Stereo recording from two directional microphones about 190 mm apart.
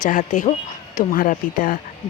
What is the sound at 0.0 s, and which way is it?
Speech, 40° left (ahead or behind).